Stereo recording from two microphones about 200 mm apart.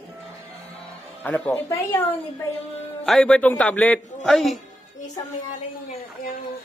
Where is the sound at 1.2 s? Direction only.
5° left (ahead or behind).